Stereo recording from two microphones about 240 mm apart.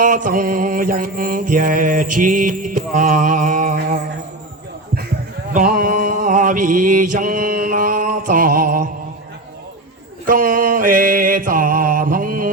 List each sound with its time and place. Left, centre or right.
0.0 s mantra: right
5.5 s mantra: right
10.2 s mantra: right